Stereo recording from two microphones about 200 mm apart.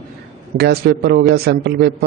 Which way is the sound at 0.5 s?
55° right (ahead or behind).